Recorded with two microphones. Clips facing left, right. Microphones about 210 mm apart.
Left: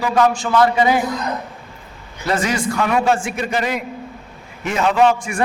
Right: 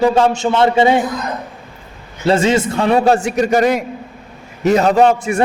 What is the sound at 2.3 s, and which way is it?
A man's voice, 25° right (ahead or behind).